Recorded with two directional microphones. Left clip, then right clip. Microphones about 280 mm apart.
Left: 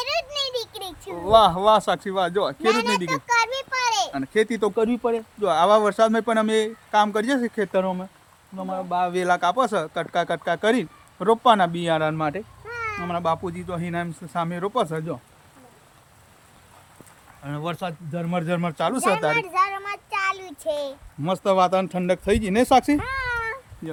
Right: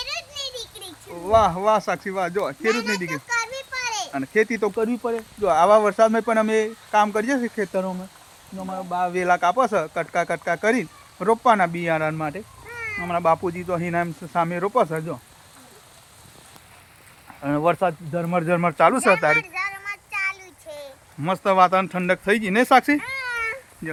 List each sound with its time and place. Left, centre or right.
0.0 s a sound: centre
1.3 s speech: centre
2.6 s a sound: centre
4.1 s speech: centre
12.7 s a sound: centre
13.1 s speech: centre
17.7 s speech: centre
19.3 s child singing: left
21.2 s speech: centre
23.0 s cat: left